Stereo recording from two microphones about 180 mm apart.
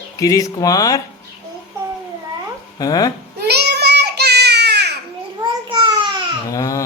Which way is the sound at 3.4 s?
65° right (ahead or behind).